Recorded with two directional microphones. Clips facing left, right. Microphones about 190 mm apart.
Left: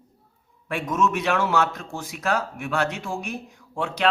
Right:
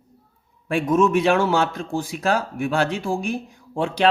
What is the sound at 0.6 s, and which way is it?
A man's voice, 30° right (ahead or behind).